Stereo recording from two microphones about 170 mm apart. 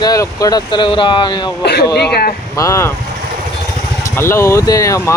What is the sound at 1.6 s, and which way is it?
Speech, 70° left (ahead or behind).